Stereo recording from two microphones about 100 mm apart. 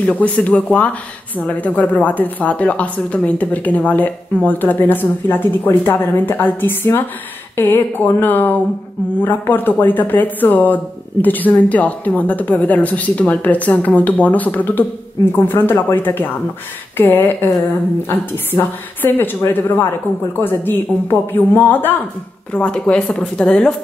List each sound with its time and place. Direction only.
0.0 s a woman's voice: 15° left (ahead or behind)